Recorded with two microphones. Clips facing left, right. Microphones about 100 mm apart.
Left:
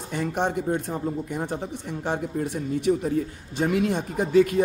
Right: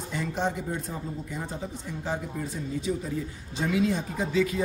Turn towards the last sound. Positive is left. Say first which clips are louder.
# left 6 dB
turn(degrees=55)  # may be behind; listen again after turning